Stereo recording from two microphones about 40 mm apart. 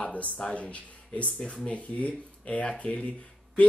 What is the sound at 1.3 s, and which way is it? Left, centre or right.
Speech, left.